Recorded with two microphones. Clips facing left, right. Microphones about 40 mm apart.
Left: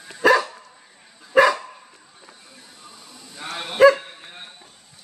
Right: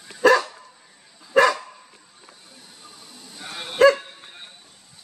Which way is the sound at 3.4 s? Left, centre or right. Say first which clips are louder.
Left 4 dB; left.